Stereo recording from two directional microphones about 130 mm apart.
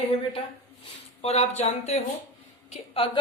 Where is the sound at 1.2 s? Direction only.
55° left (ahead or behind).